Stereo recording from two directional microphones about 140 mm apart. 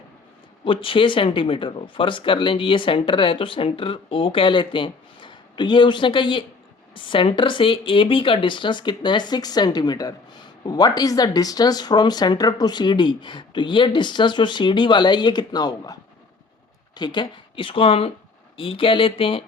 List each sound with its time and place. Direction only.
0.6 s speech: 40° left (ahead or behind)